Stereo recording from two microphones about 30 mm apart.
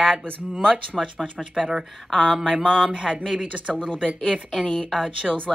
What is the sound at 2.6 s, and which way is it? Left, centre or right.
Speech, left.